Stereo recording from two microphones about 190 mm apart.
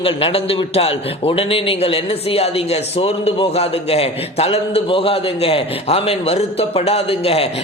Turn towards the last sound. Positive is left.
turn(degrees=30)  # may be behind; listen again after turning